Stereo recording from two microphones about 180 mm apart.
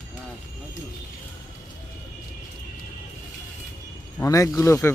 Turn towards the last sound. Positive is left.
turn(degrees=15)  # may be behind; listen again after turning